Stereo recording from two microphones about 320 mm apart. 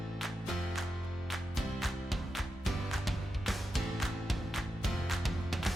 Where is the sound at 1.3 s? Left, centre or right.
Centre.